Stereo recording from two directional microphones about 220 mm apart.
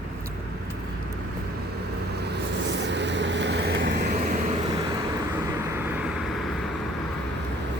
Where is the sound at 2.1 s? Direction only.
50° right (ahead or behind).